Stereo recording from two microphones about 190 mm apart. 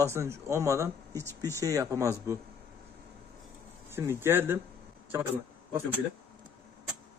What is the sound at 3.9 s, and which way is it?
Speech, 15° right (ahead or behind).